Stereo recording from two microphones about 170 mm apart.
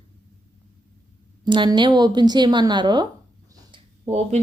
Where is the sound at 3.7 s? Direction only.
30° right (ahead or behind).